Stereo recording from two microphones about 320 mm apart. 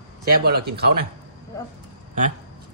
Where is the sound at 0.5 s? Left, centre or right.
Right.